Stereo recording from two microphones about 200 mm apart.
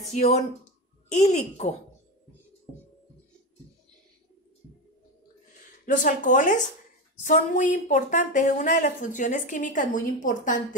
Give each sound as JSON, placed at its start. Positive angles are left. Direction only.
{"t": 0.1, "sound": "a woman's voice", "side_deg": 35}
{"t": 5.9, "sound": "a woman's voice", "side_deg": 40}